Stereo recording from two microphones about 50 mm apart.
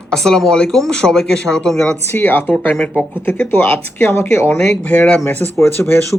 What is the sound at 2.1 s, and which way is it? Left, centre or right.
Speech, left.